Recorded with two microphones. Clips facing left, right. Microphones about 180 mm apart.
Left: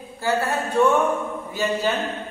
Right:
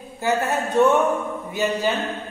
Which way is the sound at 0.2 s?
20° right (ahead or behind).